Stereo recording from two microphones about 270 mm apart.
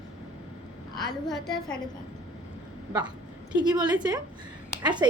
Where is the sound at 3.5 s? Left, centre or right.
Centre.